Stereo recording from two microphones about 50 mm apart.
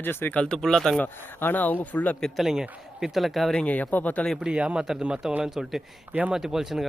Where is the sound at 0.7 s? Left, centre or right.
Centre.